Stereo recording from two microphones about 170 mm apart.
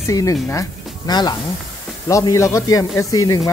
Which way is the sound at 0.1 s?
20° left (ahead or behind).